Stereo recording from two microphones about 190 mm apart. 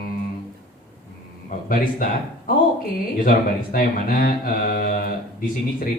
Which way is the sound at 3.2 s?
45° left (ahead or behind).